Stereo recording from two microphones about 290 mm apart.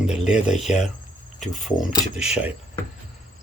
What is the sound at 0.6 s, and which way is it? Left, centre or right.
Speech, left.